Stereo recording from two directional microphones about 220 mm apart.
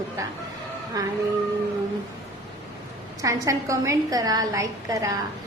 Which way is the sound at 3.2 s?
15° right (ahead or behind).